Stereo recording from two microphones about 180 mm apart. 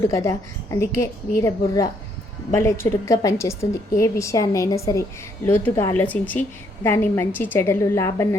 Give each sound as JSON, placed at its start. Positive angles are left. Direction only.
{"t": 0.1, "sound": "a woman's voice", "side_deg": 15}